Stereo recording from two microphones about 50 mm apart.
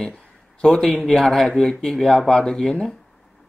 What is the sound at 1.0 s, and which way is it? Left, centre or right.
Speech, centre.